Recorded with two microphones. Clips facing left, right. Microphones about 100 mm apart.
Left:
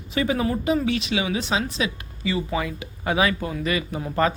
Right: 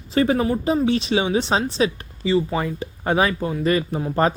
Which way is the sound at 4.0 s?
25° right (ahead or behind).